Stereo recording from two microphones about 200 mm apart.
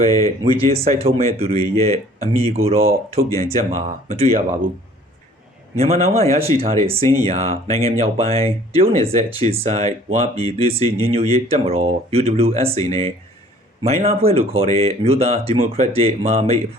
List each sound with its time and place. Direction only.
0.0 s speech: 20° left (ahead or behind)
0.5 s speech: 30° right (ahead or behind)
5.7 s speech: 30° right (ahead or behind)
6.5 s speech: 15° left (ahead or behind)
6.8 s speech: 30° right (ahead or behind)